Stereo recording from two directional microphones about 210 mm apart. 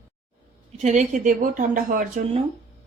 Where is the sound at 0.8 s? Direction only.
35° right (ahead or behind).